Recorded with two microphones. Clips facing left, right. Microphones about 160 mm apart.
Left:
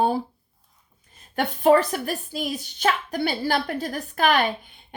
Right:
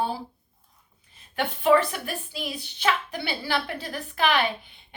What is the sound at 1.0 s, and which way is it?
A woman's voice, 45° left (ahead or behind).